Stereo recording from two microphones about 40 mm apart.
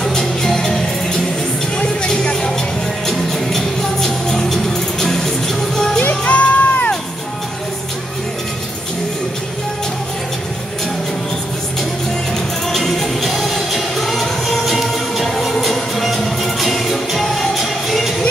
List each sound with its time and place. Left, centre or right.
0.0 s music: centre
1.8 s music: left
3.1 s music: centre
6.2 s music: left
12.6 s music: centre